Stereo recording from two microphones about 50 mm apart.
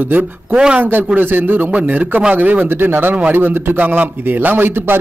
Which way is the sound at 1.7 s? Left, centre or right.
Right.